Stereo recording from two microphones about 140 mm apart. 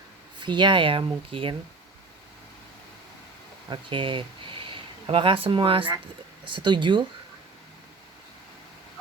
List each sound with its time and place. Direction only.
0.3 s speech: 35° right (ahead or behind)
3.7 s speech: 35° right (ahead or behind)